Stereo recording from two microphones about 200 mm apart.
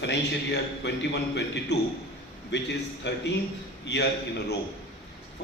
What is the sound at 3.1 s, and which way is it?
Speech, 60° left (ahead or behind).